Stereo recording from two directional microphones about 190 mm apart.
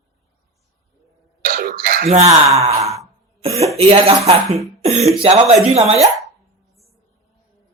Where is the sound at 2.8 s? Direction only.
15° right (ahead or behind).